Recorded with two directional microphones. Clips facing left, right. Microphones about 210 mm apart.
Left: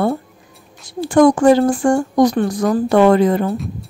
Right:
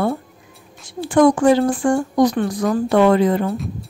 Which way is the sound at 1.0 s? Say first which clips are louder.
Left 2 dB; 40° left (ahead or behind).